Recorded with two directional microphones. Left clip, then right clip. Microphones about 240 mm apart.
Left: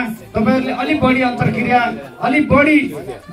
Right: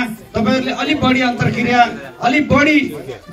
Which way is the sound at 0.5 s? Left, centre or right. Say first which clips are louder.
Even; right.